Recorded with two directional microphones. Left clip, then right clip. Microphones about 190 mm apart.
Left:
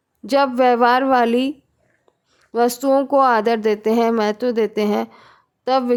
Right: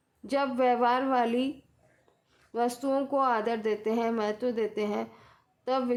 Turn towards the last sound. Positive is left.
turn(degrees=40)  # may be behind; listen again after turning